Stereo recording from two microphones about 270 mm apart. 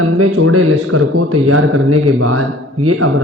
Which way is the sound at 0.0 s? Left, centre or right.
Right.